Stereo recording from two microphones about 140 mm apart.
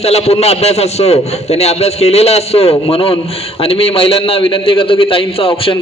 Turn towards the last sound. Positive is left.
turn(degrees=40)  # may be behind; listen again after turning